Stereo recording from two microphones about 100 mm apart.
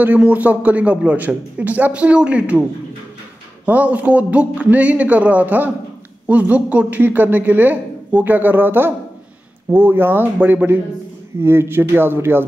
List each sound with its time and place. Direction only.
0.0 s speech: 15° right (ahead or behind)
3.6 s a man's voice: 15° right (ahead or behind)